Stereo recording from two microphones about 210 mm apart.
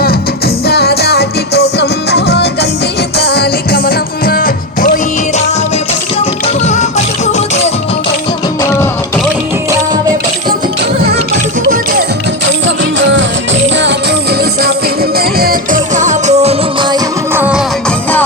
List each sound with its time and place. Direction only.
0.7 s music: 50° left (ahead or behind)
6.7 s music: 35° left (ahead or behind)
12.6 s music: 60° right (ahead or behind); by 16.6 s 30° right (ahead or behind)
16.9 s music: 10° right (ahead or behind)